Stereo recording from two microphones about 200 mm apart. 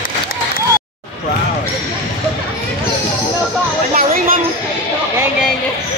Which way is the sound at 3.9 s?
40° right (ahead or behind).